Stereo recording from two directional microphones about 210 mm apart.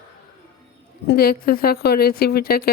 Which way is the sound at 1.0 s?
45° left (ahead or behind).